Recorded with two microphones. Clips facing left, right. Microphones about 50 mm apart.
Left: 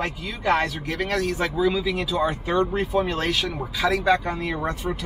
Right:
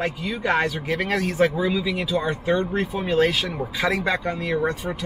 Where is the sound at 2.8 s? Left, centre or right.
Centre.